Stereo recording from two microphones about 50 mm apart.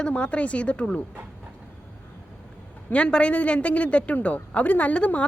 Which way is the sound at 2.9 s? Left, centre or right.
Left.